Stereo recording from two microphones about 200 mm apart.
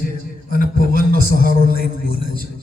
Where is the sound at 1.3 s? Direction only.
45° right (ahead or behind).